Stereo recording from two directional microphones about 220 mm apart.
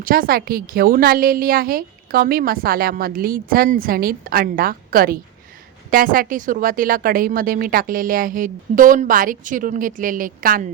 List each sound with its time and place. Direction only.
0.0 s a woman's voice: 40° right (ahead or behind)